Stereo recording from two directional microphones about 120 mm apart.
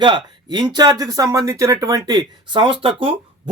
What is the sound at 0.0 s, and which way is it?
Speech, 40° right (ahead or behind).